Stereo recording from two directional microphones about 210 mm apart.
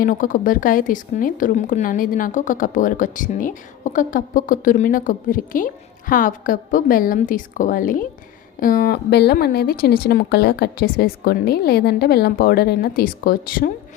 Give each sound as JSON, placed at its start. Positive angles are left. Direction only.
{"t": 0.0, "sound": "a woman's voice", "side_deg": 40}